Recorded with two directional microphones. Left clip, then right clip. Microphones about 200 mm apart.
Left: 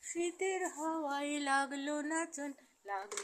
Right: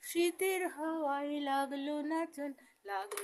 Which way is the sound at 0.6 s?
15° left (ahead or behind).